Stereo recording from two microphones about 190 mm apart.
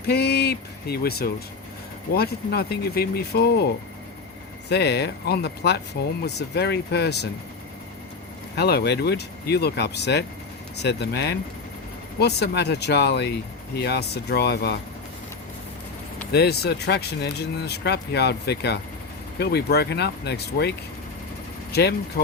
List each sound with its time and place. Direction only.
0.0 s speech: 60° left (ahead or behind)
4.7 s speech: 60° left (ahead or behind)
8.5 s speech: 60° left (ahead or behind)
16.3 s speech: 60° left (ahead or behind)